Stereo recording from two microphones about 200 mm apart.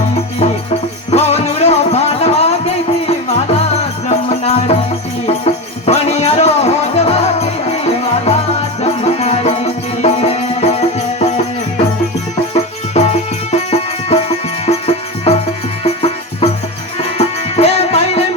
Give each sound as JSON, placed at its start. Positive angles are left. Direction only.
{"t": 1.1, "sound": "music", "side_deg": 30}
{"t": 12.9, "sound": "music", "side_deg": 35}